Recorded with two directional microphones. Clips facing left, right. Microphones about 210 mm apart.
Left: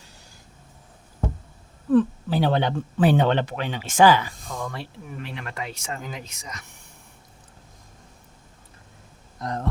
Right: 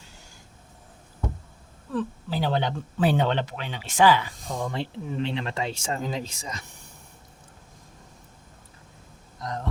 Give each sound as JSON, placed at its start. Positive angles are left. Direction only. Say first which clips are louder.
{"t": 1.9, "sound": "speech", "louder": "left 10 dB", "side_deg": 60}
{"t": 4.4, "sound": "speech", "louder": "right 3 dB", "side_deg": -25}